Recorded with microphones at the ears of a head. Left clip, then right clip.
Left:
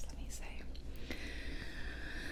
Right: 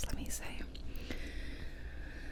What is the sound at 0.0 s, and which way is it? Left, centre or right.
Whispering, right.